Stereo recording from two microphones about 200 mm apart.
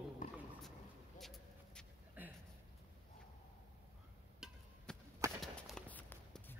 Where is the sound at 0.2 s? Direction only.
40° left (ahead or behind).